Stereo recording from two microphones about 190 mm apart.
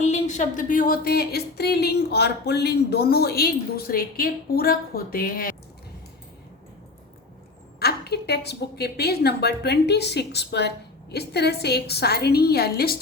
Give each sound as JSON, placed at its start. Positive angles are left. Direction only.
{"t": 0.0, "sound": "speech", "side_deg": 40}
{"t": 7.8, "sound": "a woman's voice", "side_deg": 55}